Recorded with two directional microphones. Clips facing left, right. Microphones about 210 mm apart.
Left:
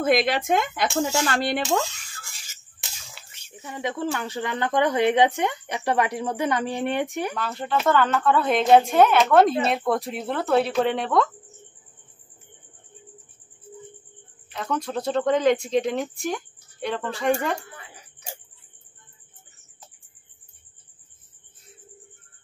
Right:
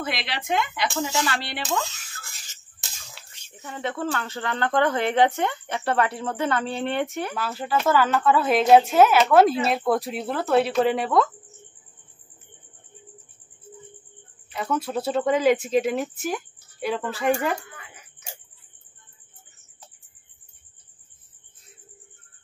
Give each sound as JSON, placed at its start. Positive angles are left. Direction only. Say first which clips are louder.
{"t": 0.0, "sound": "speech", "louder": "left 10 dB", "side_deg": 50}
{"t": 3.1, "sound": "whispering", "louder": "left 1 dB", "side_deg": 0}
{"t": 3.6, "sound": "speech", "louder": "left 1 dB", "side_deg": 10}
{"t": 7.3, "sound": "a woman's voice", "louder": "right 3 dB", "side_deg": -5}
{"t": 14.5, "sound": "a woman's voice", "louder": "right 1 dB", "side_deg": -5}
{"t": 17.6, "sound": "a sound", "louder": "left 1 dB", "side_deg": 30}